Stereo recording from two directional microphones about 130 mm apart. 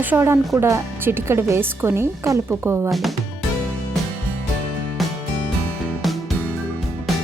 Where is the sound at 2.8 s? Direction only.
Centre (ahead or behind).